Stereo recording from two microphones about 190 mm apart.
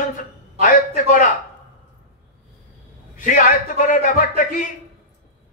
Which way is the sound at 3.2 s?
45° left (ahead or behind).